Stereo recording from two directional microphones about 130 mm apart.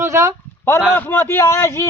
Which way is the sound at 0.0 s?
20° right (ahead or behind).